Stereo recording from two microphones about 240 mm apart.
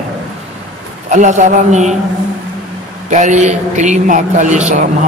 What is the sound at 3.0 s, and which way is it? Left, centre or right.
A man's voice, right.